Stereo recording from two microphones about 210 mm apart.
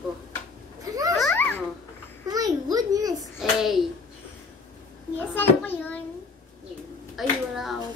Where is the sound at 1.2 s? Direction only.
10° left (ahead or behind).